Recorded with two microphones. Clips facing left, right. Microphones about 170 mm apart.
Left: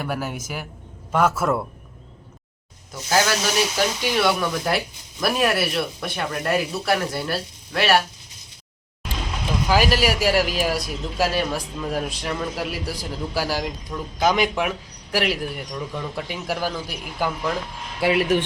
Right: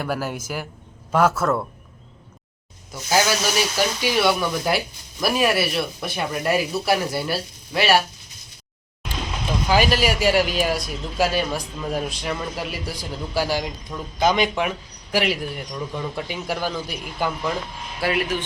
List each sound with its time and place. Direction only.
0.0 s a man's voice: centre (ahead or behind)
2.9 s a man's voice: 5° right (ahead or behind)
9.6 s a man's voice: 5° left (ahead or behind)
18.0 s speech: 20° left (ahead or behind)